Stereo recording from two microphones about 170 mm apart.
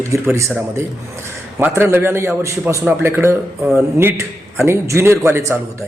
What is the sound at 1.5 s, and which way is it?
A man's voice, 15° right (ahead or behind).